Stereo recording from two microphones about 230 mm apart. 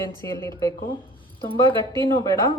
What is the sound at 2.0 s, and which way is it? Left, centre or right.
Speech, centre.